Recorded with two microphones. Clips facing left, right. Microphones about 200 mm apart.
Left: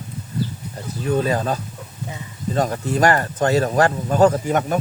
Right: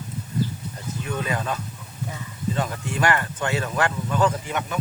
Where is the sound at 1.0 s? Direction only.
35° left (ahead or behind).